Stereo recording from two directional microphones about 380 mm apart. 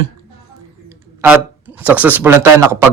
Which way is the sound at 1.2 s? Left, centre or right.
Centre.